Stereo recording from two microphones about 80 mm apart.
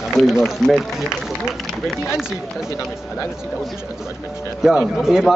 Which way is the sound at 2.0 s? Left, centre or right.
Centre.